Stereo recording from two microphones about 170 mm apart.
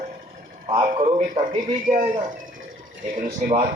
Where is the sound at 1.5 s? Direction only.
50° right (ahead or behind).